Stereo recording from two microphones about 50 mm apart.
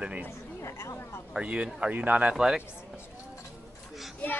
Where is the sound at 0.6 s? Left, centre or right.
Left.